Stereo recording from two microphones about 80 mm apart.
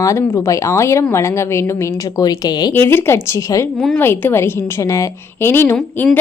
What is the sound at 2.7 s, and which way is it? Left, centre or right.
A woman's voice, left.